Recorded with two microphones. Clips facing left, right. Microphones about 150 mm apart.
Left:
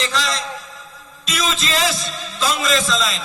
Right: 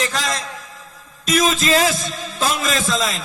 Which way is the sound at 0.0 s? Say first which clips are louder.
Even; 50° right (ahead or behind).